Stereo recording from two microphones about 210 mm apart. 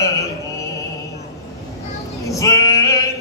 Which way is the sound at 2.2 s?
15° left (ahead or behind).